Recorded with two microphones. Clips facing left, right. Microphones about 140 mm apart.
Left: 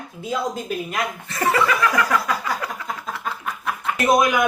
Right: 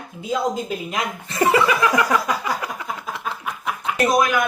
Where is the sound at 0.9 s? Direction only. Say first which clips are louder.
Even; 20° right (ahead or behind).